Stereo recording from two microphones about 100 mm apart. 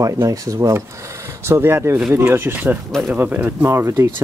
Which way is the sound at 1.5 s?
25° right (ahead or behind).